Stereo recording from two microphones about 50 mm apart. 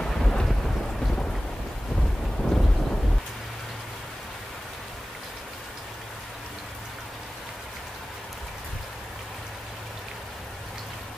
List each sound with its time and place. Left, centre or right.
0.0 s thunder: centre
2.4 s wind noise: centre